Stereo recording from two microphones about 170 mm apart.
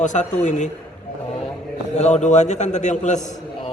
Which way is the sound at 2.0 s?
40° left (ahead or behind).